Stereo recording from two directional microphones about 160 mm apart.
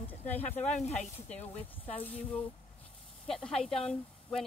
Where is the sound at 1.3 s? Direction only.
10° left (ahead or behind).